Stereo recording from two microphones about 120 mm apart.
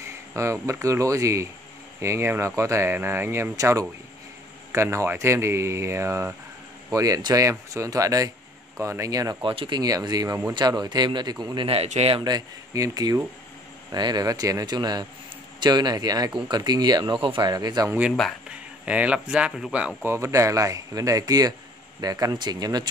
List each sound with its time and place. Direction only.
0.0 s speech: 25° right (ahead or behind)
9.4 s speech: 45° right (ahead or behind)
11.7 s speech: 60° right (ahead or behind)
12.2 s speech: 35° right (ahead or behind)
18.5 s speech: 10° right (ahead or behind)
20.0 s speech: 20° right (ahead or behind)